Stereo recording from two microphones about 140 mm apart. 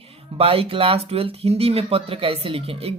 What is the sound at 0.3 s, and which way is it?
Speech, 45° right (ahead or behind).